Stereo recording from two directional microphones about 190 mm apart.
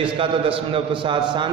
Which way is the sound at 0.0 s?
30° right (ahead or behind).